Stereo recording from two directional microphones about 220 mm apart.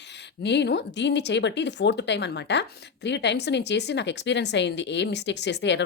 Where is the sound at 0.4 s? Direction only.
50° left (ahead or behind).